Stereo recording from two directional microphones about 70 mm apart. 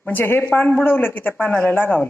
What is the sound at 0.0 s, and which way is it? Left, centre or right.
Speech, left.